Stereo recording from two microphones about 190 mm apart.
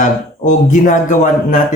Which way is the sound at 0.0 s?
40° left (ahead or behind).